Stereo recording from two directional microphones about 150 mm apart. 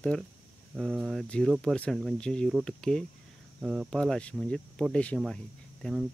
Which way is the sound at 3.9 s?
5° left (ahead or behind).